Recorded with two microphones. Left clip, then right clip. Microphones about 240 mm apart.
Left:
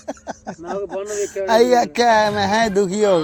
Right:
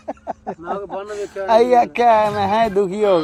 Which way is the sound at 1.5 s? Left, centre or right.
Left.